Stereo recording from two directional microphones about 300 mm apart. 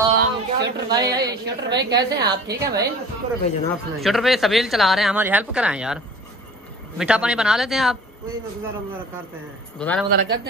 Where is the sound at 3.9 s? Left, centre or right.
Centre.